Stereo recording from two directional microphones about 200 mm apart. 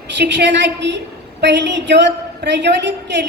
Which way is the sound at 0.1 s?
60° right (ahead or behind).